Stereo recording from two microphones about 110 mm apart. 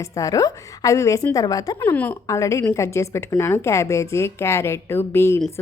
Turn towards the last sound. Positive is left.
turn(degrees=20)  # may be behind; listen again after turning